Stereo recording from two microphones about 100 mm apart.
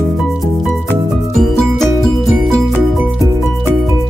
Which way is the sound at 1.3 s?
5° left (ahead or behind).